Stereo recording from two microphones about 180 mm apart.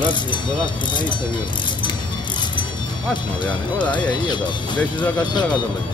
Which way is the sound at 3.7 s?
25° left (ahead or behind).